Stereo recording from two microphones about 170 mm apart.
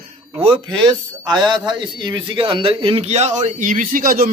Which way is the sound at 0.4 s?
30° right (ahead or behind).